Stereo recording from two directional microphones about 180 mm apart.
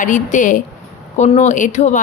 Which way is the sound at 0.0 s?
45° left (ahead or behind).